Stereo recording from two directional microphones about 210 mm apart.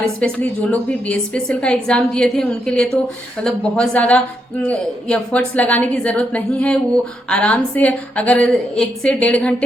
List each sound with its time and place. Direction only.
0.2 s a woman's voice: 5° left (ahead or behind)